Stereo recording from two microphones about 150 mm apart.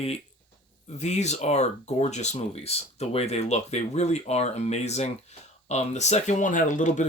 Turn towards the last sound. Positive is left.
turn(degrees=55)  # may be behind; listen again after turning